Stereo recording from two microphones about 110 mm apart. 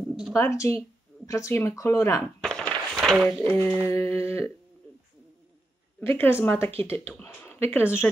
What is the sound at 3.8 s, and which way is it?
Speech, 20° left (ahead or behind).